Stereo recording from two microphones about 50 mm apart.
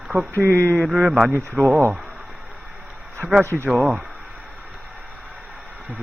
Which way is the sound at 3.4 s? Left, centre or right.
Right.